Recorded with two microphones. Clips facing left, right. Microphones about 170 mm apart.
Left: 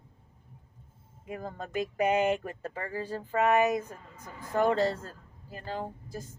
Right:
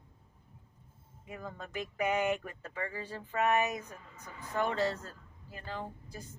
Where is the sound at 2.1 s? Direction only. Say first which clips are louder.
Left 4 dB; 25° left (ahead or behind).